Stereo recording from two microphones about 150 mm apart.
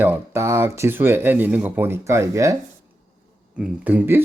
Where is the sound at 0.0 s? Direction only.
15° right (ahead or behind).